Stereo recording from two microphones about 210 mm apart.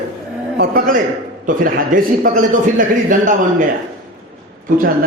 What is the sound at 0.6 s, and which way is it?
A man's voice, 40° right (ahead or behind).